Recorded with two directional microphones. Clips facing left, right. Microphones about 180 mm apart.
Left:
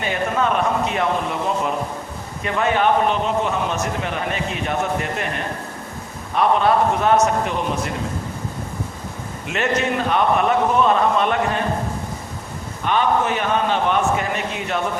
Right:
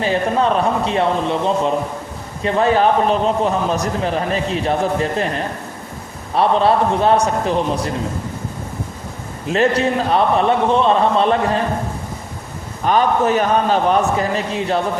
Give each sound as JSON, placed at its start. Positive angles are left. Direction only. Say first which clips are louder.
{"t": 0.0, "sound": "a man's voice", "louder": "right 4 dB", "side_deg": -30}
{"t": 6.3, "sound": "a man's voice", "louder": "right 2 dB", "side_deg": -30}
{"t": 9.5, "sound": "a man's voice", "louder": "right 5 dB", "side_deg": -35}
{"t": 12.8, "sound": "a man's voice", "louder": "right 4 dB", "side_deg": -40}